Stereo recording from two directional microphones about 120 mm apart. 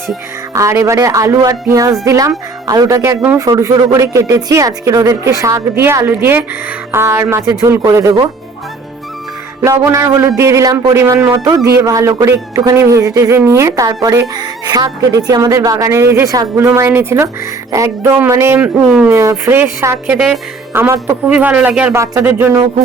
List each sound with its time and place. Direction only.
0.5 s a man's voice: 25° right (ahead or behind)
9.6 s a man's voice: 25° right (ahead or behind)
18.8 s speech: 5° right (ahead or behind)
19.1 s a man's voice: 25° right (ahead or behind)
20.1 s speech: centre (ahead or behind)
20.7 s a man's voice: 20° right (ahead or behind)
21.2 s speech: 10° right (ahead or behind)
21.9 s a man's voice: 25° right (ahead or behind)
22.2 s speech: 15° right (ahead or behind)